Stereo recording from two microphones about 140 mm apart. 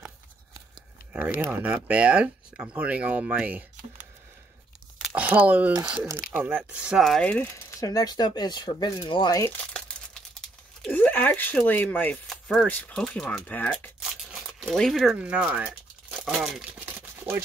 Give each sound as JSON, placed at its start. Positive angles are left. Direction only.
{"t": 1.5, "sound": "speech", "side_deg": -15}
{"t": 5.1, "sound": "speech", "side_deg": -10}
{"t": 7.8, "sound": "speech", "side_deg": 25}
{"t": 10.9, "sound": "speech", "side_deg": 10}
{"t": 14.7, "sound": "speech", "side_deg": 0}
{"t": 16.8, "sound": "a sound", "side_deg": -15}